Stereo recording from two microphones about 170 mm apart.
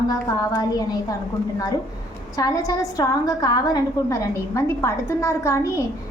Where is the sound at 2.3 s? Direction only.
20° left (ahead or behind).